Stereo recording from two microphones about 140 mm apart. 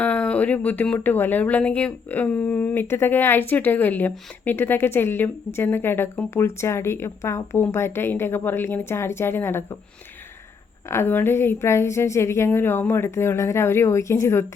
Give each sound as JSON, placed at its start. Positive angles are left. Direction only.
{"t": 0.0, "sound": "a woman's voice", "side_deg": 10}
{"t": 10.8, "sound": "a woman's voice", "side_deg": 15}